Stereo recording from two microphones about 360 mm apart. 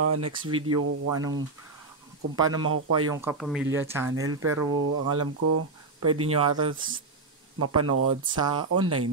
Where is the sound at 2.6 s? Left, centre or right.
Right.